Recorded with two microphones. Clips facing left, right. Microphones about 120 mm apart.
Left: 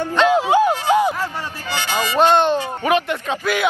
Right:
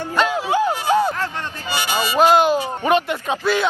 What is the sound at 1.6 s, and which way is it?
Music, 15° right (ahead or behind).